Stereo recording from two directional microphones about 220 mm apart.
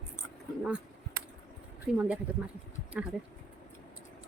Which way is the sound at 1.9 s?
5° right (ahead or behind).